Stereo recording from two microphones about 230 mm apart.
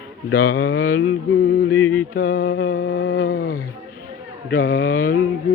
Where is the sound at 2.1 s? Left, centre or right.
Left.